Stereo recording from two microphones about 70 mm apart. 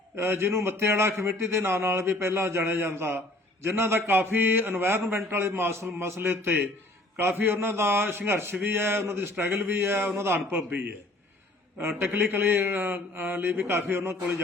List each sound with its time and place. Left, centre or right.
0.2 s a man's voice: right
10.7 s a man's voice: right